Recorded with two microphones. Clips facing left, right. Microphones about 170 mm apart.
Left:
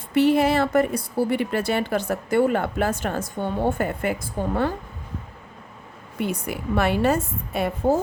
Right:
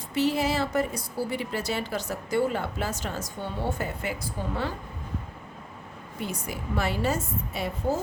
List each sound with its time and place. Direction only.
0.1 s a woman's voice: 60° left (ahead or behind)
6.1 s a woman's voice: 60° left (ahead or behind)